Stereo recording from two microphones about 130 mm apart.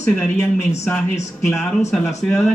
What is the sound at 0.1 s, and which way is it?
Speech, 5° left (ahead or behind).